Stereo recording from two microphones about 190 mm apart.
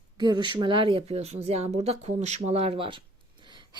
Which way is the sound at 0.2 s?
25° right (ahead or behind).